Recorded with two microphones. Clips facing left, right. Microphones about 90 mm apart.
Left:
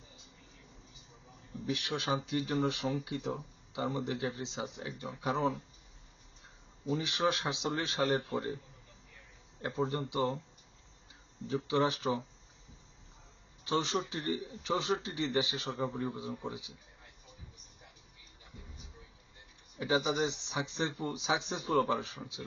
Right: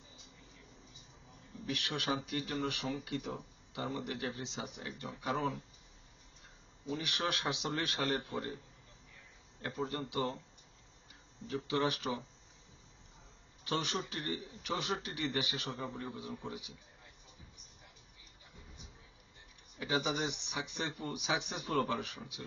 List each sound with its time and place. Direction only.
1.6 s speech: 20° left (ahead or behind)
6.9 s speech: 20° left (ahead or behind)
9.6 s speech: 25° left (ahead or behind)
11.4 s speech: 20° left (ahead or behind)
13.7 s speech: 20° left (ahead or behind)
19.8 s speech: 25° left (ahead or behind)